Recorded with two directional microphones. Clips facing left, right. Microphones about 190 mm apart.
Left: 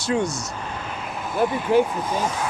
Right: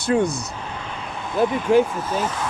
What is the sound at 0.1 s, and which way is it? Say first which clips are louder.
Speech: right 3 dB; 50° right (ahead or behind).